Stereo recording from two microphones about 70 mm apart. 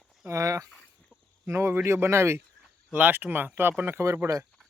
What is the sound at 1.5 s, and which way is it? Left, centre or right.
Speech, right.